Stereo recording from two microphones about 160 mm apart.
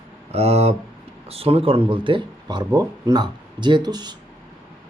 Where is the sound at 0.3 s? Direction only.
40° right (ahead or behind).